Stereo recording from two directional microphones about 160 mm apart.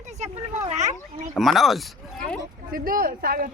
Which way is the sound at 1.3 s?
Centre (ahead or behind).